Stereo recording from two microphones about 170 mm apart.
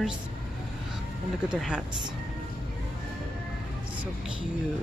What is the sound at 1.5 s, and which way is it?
Speech, 5° right (ahead or behind).